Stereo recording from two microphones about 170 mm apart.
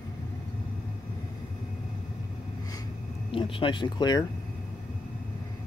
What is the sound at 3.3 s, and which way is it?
Speech, 30° left (ahead or behind).